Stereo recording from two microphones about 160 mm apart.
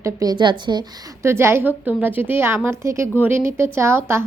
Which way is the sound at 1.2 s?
15° right (ahead or behind).